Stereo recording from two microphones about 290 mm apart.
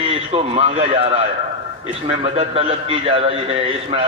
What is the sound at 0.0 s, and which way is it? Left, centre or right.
A man's voice, centre.